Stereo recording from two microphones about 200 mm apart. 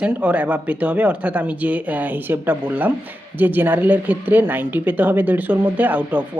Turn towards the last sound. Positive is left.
turn(degrees=-10)  # may be behind; listen again after turning